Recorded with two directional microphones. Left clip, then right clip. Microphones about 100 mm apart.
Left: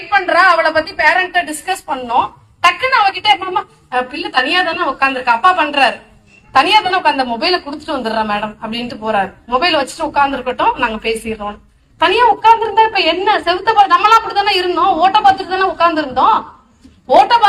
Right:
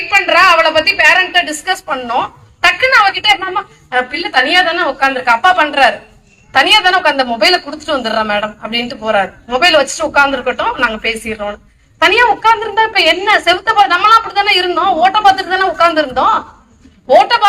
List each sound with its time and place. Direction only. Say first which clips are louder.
0.1 s a woman's voice: right 2 dB; 35° right (ahead or behind)